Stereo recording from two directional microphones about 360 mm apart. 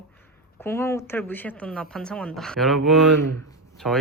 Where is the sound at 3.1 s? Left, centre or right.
Right.